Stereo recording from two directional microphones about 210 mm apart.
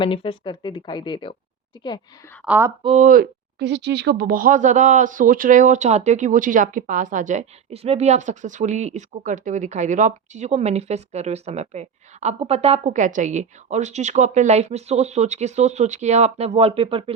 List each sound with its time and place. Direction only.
0.0 s speech: 25° left (ahead or behind)
2.4 s speech: 10° right (ahead or behind)
2.8 s speech: 35° right (ahead or behind)